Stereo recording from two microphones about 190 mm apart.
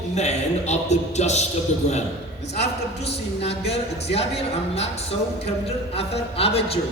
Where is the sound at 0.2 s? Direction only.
35° left (ahead or behind).